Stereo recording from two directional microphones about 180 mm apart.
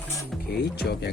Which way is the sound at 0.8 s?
65° left (ahead or behind).